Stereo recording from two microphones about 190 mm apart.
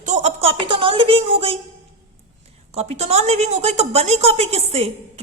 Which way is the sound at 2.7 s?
35° right (ahead or behind).